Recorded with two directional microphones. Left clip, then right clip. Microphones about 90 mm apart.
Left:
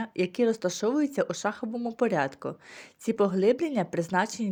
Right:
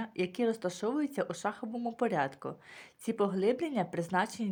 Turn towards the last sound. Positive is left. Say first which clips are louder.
# left 5 dB
turn(degrees=45)  # may be behind; listen again after turning